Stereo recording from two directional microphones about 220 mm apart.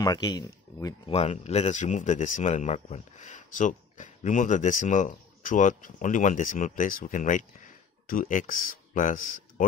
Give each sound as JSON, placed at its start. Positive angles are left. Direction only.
{"t": 0.0, "sound": "speech", "side_deg": 20}
{"t": 1.1, "sound": "speech", "side_deg": 30}